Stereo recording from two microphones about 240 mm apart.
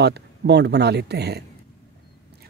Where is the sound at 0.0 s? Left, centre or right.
Right.